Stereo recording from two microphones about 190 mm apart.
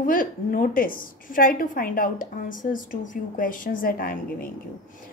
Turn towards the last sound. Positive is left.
turn(degrees=50)  # may be behind; listen again after turning